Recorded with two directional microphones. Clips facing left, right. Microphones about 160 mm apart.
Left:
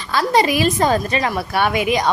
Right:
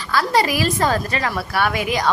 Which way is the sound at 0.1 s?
20° left (ahead or behind).